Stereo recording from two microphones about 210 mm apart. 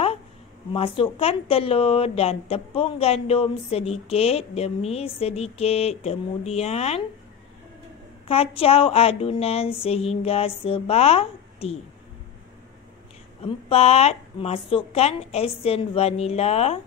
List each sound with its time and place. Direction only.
0.7 s a woman's voice: 25° left (ahead or behind)
8.3 s a woman's voice: 30° left (ahead or behind)
13.4 s a woman's voice: 30° left (ahead or behind)